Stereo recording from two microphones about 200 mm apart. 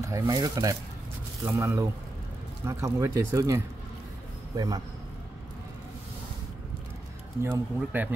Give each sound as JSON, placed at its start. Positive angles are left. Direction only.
{"t": 0.0, "sound": "a man's voice", "side_deg": -15}
{"t": 7.4, "sound": "speech", "side_deg": -10}